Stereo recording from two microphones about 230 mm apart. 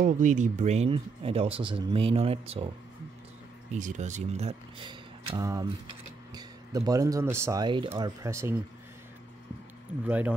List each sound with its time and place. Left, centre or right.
0.0 s speech: right
3.7 s speech: right; by 8.5 s centre
10.0 s speech: centre